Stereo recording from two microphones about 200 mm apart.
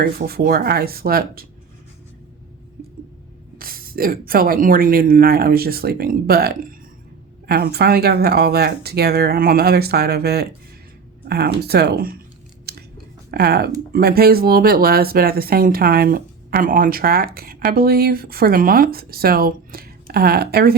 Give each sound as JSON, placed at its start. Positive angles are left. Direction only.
{"t": 0.0, "sound": "speech", "side_deg": -50}
{"t": 3.6, "sound": "speech", "side_deg": -45}
{"t": 13.3, "sound": "speech", "side_deg": -50}